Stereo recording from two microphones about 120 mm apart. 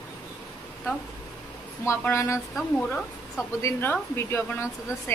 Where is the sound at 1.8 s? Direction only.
20° left (ahead or behind).